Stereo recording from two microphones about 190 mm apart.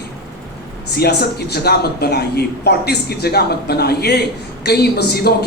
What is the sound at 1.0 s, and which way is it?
A woman's voice, 55° left (ahead or behind).